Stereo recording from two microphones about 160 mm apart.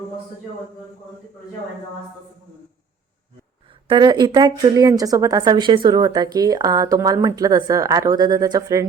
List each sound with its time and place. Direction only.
3.8 s speech: 30° right (ahead or behind)